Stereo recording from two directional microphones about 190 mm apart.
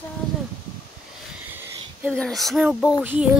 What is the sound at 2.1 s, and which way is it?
Speech, 5° left (ahead or behind).